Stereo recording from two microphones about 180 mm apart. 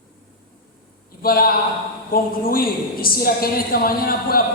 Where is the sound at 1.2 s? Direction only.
55° left (ahead or behind).